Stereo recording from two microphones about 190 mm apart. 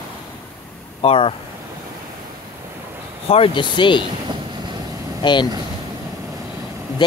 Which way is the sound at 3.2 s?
30° left (ahead or behind).